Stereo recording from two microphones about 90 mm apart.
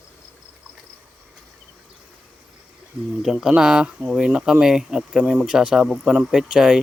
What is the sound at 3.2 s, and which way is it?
Speech, 5° right (ahead or behind).